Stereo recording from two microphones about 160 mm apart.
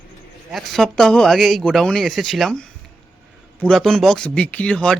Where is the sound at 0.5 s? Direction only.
Centre (ahead or behind).